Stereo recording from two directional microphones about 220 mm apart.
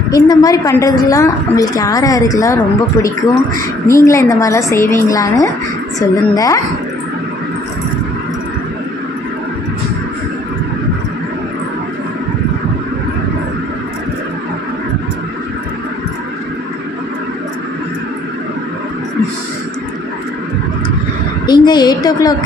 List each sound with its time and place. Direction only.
0.1 s a woman's voice: 15° left (ahead or behind)
3.8 s a woman's voice: 15° left (ahead or behind)
21.5 s a sound: 20° left (ahead or behind)